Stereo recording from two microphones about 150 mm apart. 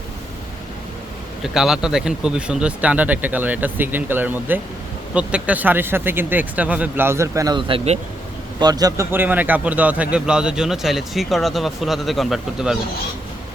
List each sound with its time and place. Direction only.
1.5 s speech: 5° right (ahead or behind); by 7.6 s 20° right (ahead or behind)
8.6 s a man's voice: 25° right (ahead or behind)
9.1 s speech: 10° right (ahead or behind)